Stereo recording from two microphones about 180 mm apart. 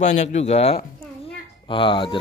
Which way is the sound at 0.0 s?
40° left (ahead or behind).